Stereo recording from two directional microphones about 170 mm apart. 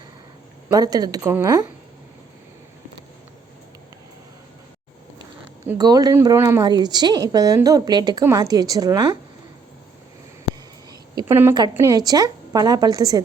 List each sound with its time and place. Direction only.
0.7 s a woman's voice: 20° right (ahead or behind)
5.7 s a woman's voice: 25° right (ahead or behind)
11.1 s a woman's voice: 25° right (ahead or behind)